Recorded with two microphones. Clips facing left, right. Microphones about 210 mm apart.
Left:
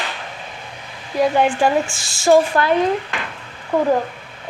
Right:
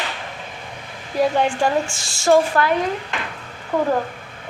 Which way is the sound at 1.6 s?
5° left (ahead or behind).